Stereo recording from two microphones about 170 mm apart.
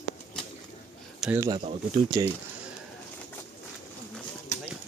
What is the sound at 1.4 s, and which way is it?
Speech, 25° right (ahead or behind).